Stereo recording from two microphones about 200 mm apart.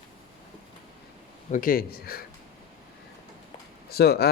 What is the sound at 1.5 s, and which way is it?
Speech, 40° left (ahead or behind).